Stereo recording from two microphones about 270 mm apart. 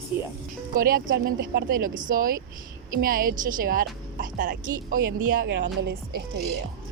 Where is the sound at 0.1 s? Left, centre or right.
Centre.